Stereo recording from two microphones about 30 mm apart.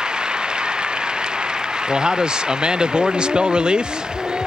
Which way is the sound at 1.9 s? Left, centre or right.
Right.